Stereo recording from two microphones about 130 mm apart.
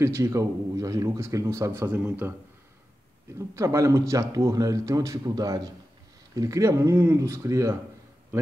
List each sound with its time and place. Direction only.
0.0 s speech: 20° right (ahead or behind)
3.3 s speech: 20° right (ahead or behind)